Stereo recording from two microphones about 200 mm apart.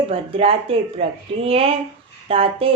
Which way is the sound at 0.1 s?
30° right (ahead or behind).